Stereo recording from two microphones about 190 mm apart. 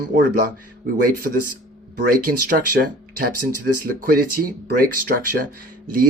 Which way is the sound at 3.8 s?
50° right (ahead or behind).